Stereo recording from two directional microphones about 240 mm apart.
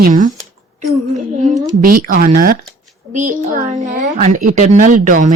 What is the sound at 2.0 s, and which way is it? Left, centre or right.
A woman's voice, right.